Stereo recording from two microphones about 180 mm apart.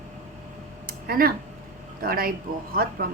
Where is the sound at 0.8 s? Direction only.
55° right (ahead or behind).